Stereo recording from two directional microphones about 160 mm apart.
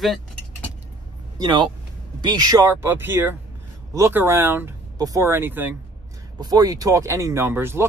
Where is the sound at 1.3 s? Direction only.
25° right (ahead or behind).